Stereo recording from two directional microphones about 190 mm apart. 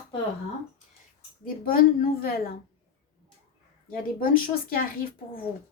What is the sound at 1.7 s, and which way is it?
Speech, 50° left (ahead or behind).